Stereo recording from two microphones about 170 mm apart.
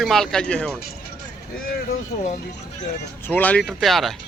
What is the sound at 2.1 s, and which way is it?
Speech, 65° left (ahead or behind).